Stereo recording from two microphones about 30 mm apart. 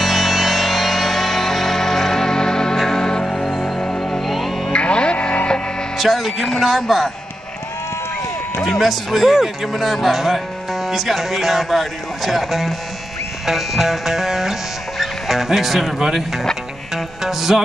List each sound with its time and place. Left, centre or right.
0.0 s music: centre
3.3 s music: centre
4.7 s music: left
5.9 s speech: centre
8.5 s speech: centre
13.5 s music: centre
16.9 s music: centre